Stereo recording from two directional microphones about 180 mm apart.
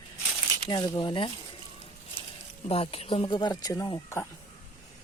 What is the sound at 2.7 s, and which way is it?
Speech, 30° left (ahead or behind).